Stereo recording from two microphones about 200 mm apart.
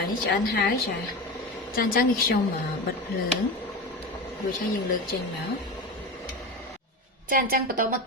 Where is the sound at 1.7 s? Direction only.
45° left (ahead or behind).